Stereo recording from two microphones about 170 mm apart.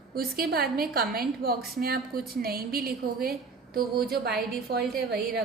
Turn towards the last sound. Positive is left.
turn(degrees=-65)  # may be behind; listen again after turning